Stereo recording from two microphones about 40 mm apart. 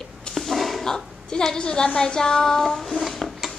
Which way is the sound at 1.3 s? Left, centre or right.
Centre.